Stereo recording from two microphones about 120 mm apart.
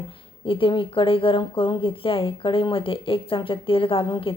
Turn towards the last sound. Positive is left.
turn(degrees=45)  # may be behind; listen again after turning